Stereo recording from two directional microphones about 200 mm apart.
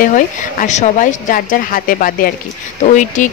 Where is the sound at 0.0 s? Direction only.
40° left (ahead or behind).